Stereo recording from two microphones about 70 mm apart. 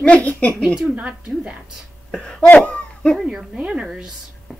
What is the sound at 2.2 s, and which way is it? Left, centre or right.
Cough, centre.